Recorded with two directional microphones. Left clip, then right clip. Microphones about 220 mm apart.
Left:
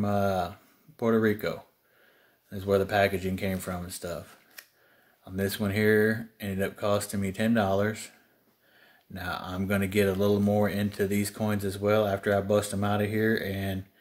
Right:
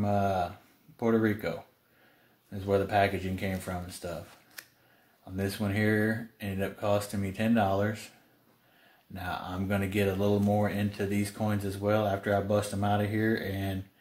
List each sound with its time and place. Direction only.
0.0 s speech: 45° left (ahead or behind)
2.5 s speech: 45° left (ahead or behind)
5.2 s speech: 45° left (ahead or behind)
9.1 s speech: 45° left (ahead or behind)